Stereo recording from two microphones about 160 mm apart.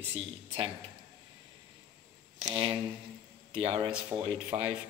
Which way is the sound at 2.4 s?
35° right (ahead or behind).